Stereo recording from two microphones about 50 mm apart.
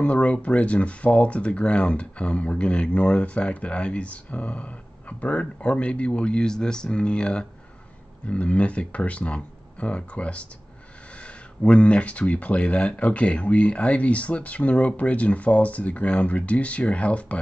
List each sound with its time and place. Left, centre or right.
0.0 s speech: left